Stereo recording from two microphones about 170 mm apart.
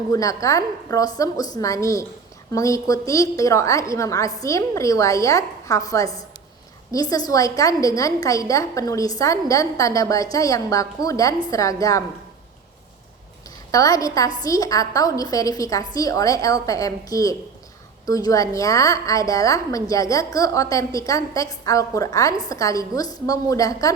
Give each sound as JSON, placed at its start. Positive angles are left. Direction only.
{"t": 0.1, "sound": "a woman's voice", "side_deg": 20}
{"t": 13.7, "sound": "a woman's voice", "side_deg": 20}